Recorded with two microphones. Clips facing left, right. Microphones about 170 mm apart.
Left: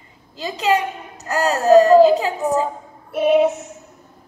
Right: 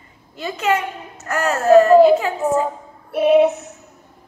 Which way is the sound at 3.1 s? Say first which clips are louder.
Right 2 dB; 5° right (ahead or behind).